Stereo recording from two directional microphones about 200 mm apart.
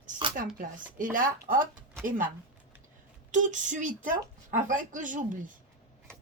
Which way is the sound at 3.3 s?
40° right (ahead or behind).